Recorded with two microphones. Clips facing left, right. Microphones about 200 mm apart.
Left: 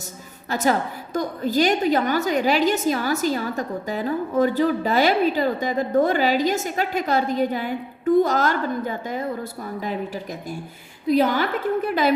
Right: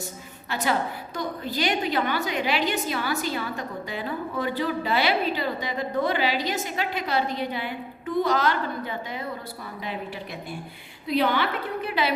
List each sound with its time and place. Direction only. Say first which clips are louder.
0.5 s a woman's voice: left 4 dB; 40° left (ahead or behind)
11.0 s a woman's voice: left 4 dB; 45° left (ahead or behind)